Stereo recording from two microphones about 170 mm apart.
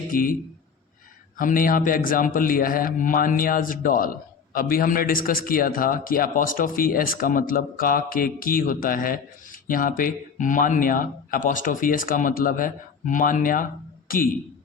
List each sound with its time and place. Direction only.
0.1 s a man's voice: 55° left (ahead or behind)
1.4 s a man's voice: 55° left (ahead or behind)